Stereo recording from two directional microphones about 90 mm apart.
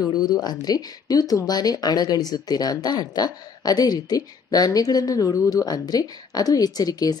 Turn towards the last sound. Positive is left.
turn(degrees=45)  # may be behind; listen again after turning